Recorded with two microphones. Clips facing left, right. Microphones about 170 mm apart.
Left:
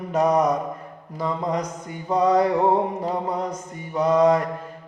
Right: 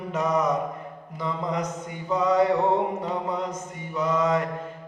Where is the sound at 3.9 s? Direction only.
35° left (ahead or behind).